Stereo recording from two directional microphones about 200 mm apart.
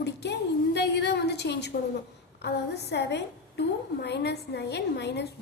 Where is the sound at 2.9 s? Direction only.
60° left (ahead or behind).